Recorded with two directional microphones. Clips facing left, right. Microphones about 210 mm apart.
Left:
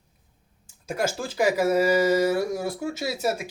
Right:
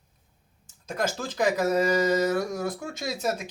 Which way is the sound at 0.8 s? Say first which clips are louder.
Left 2 dB; 10° left (ahead or behind).